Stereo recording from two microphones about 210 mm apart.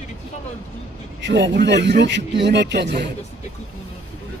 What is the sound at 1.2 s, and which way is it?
Speech, 55° right (ahead or behind).